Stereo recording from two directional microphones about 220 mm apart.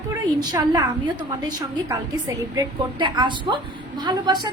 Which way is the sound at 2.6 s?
20° right (ahead or behind).